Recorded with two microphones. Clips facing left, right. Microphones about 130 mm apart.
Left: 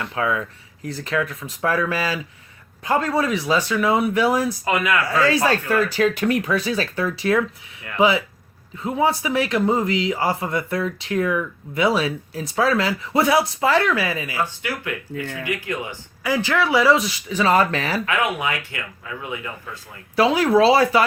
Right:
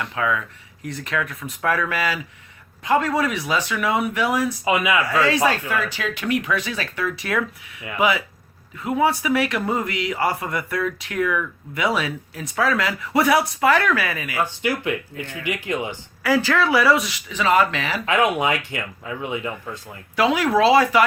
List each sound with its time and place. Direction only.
0.1 s speech: 30° left (ahead or behind)
4.6 s speech: 10° right (ahead or behind)
5.0 s a man's voice: 35° left (ahead or behind)
14.6 s speech: 15° right (ahead or behind)
16.2 s speech: 15° left (ahead or behind); by 18.0 s 40° left (ahead or behind)
18.0 s speech: 25° right (ahead or behind)
20.1 s speech: 35° left (ahead or behind)